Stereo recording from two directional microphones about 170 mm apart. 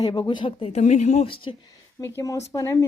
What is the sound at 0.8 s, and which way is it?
Speech, 45° left (ahead or behind).